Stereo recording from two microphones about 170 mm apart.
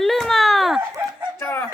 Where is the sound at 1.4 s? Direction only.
15° left (ahead or behind).